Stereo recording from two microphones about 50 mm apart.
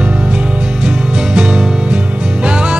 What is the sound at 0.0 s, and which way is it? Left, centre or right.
Music, right.